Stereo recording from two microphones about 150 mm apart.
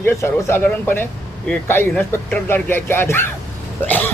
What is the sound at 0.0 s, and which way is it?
Speech, 15° left (ahead or behind).